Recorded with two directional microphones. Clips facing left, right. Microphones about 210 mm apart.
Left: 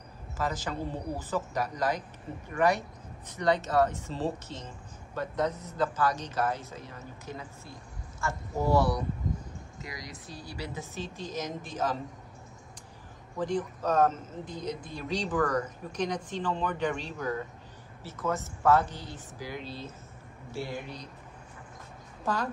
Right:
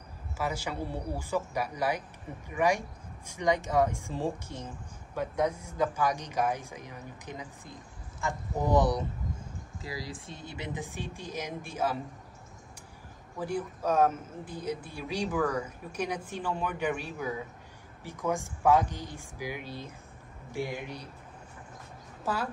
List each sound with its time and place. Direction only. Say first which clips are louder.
0.4 s speech: left 1 dB; 10° right (ahead or behind)
9.8 s speech: right 5 dB; 30° right (ahead or behind); by 12.0 s 10° right (ahead or behind)
13.4 s speech: left 2 dB; 10° right (ahead or behind)
22.2 s speech: left 1 dB; 5° right (ahead or behind)